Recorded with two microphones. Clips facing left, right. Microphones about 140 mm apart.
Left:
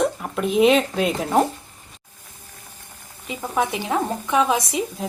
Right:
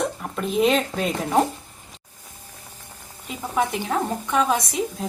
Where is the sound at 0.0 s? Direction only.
5° left (ahead or behind).